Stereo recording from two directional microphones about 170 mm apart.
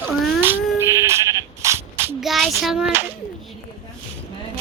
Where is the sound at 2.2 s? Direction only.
Centre (ahead or behind).